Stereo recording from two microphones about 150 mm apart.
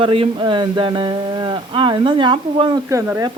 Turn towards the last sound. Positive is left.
turn(degrees=-20)  # may be behind; listen again after turning